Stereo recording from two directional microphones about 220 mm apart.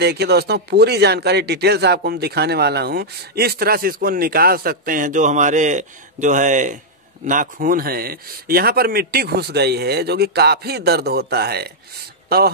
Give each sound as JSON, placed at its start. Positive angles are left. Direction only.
{"t": 0.0, "sound": "speech", "side_deg": -50}